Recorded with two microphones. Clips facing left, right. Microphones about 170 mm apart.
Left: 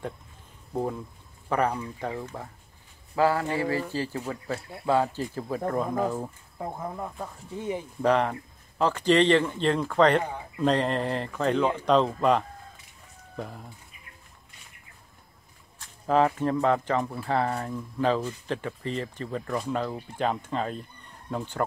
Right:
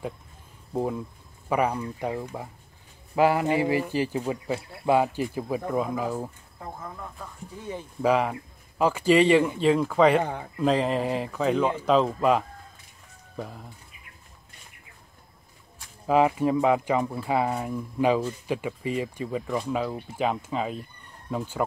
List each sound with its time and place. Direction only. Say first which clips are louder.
0.7 s speech: right 2 dB; 5° right (ahead or behind)
7.0 s speech: left 4 dB; 30° left (ahead or behind)
8.0 s speech: right 1 dB; 5° right (ahead or behind)
16.1 s speech: right 2 dB; 10° right (ahead or behind)